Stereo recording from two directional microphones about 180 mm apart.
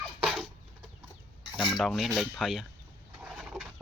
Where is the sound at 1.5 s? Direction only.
Centre (ahead or behind).